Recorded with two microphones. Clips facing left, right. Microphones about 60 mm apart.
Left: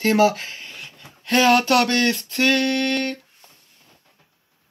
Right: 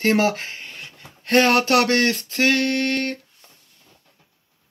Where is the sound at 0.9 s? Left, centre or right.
Right.